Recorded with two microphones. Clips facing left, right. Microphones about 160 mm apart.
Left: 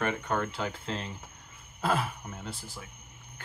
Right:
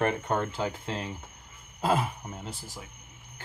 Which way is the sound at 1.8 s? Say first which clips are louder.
Right 3 dB; 20° right (ahead or behind).